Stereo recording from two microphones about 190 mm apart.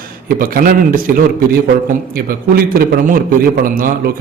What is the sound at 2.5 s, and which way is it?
A man's voice, 50° right (ahead or behind).